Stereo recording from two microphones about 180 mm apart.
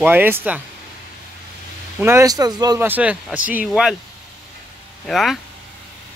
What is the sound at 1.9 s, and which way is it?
Speech, 15° right (ahead or behind).